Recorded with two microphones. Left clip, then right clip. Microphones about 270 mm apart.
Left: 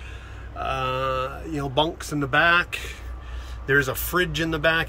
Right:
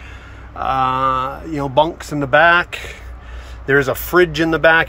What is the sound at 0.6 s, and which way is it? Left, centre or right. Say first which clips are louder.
Speech: right 9 dB; centre.